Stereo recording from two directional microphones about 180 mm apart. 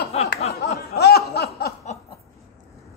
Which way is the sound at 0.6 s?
65° left (ahead or behind).